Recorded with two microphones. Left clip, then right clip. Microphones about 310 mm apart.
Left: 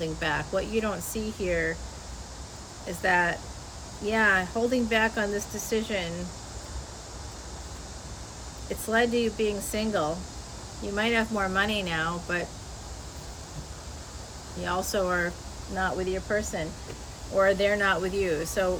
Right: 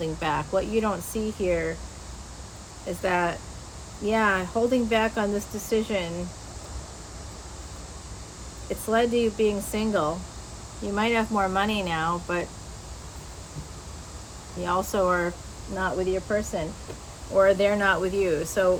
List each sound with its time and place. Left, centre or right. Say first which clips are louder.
0.0 s speech: right 2 dB; centre
3.0 s speech: left 1 dB; centre
8.9 s speech: right 2 dB; centre
14.6 s speech: right 4 dB; centre